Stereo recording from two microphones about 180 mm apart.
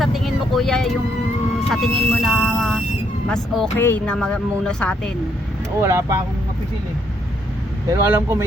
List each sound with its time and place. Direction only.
0.0 s vehicle: centre (ahead or behind)
1.7 s a sound: centre (ahead or behind)
3.2 s speech: 5° left (ahead or behind)
5.8 s speech: 15° right (ahead or behind)
7.9 s speech: 15° right (ahead or behind)